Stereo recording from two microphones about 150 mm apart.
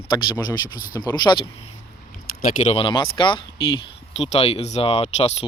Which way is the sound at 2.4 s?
55° left (ahead or behind).